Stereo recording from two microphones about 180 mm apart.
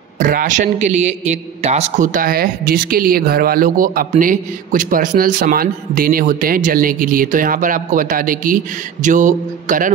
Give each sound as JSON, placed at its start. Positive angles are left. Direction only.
{"t": 0.2, "sound": "a man's voice", "side_deg": -45}